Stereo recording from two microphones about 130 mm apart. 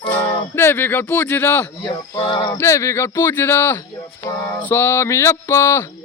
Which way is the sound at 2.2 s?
35° left (ahead or behind).